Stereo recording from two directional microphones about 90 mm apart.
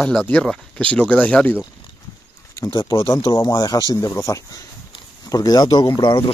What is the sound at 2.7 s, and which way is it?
Speech, 40° left (ahead or behind).